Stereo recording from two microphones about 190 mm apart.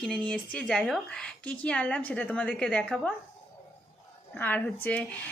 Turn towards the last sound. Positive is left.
turn(degrees=10)  # may be behind; listen again after turning